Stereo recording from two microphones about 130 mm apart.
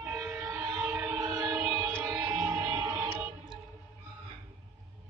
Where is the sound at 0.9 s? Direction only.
10° right (ahead or behind).